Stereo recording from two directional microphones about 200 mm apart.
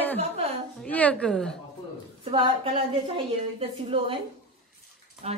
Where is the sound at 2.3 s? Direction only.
30° right (ahead or behind).